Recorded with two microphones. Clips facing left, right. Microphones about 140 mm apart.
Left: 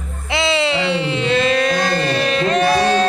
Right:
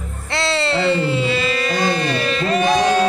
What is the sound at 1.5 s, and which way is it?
Music, 50° left (ahead or behind).